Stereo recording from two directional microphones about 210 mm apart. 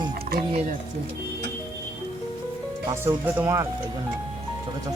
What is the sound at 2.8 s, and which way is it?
Speech, 10° right (ahead or behind).